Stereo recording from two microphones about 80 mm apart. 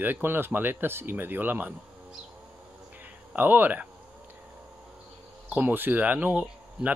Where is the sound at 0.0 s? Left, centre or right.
Right.